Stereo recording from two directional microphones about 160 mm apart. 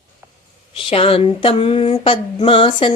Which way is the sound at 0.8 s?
35° left (ahead or behind).